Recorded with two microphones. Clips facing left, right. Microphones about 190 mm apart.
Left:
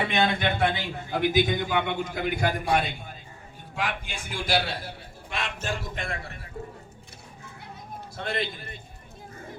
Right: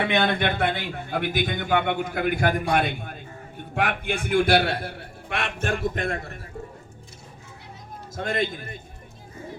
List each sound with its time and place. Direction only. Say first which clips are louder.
0.1 s a man's voice: right 2 dB; 60° right (ahead or behind)
8.1 s a man's voice: right 5 dB; 45° right (ahead or behind)